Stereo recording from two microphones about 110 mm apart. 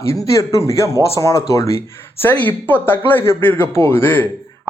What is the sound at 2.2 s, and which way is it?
Speech, 15° left (ahead or behind).